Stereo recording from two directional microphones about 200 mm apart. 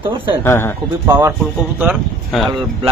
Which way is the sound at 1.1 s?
10° right (ahead or behind).